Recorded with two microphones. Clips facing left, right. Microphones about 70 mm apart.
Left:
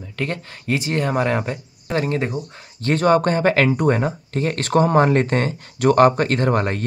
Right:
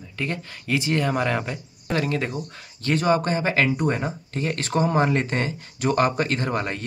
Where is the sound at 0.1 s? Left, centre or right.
Left.